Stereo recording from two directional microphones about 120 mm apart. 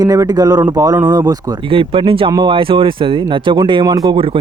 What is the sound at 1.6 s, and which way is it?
Speech, 45° right (ahead or behind).